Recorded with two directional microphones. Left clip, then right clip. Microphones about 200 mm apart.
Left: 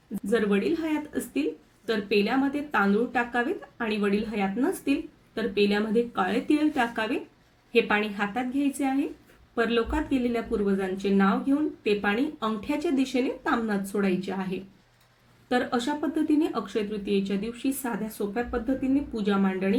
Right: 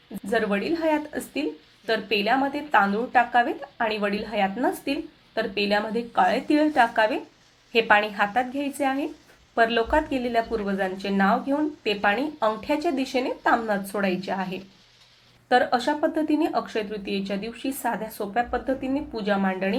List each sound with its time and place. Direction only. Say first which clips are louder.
0.3 s speech: right 1 dB; centre (ahead or behind)